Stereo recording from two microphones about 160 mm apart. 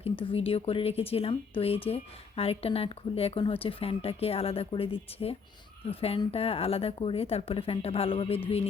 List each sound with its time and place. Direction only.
0.0 s speech: 35° left (ahead or behind)